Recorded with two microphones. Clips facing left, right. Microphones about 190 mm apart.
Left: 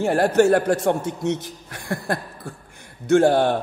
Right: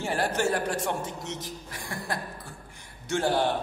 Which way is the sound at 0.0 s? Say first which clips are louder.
Left 10 dB; 60° left (ahead or behind).